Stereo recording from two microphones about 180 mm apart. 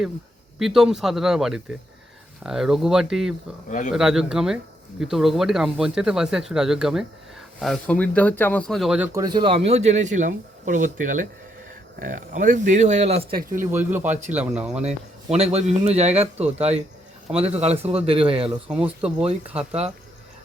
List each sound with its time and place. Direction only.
0.6 s speech: centre (ahead or behind)
3.7 s a man's voice: 45° left (ahead or behind)
3.9 s speech: 5° right (ahead or behind)
9.1 s speech: 25° right (ahead or behind)
13.7 s speech: 10° right (ahead or behind)
14.8 s speech: 35° right (ahead or behind)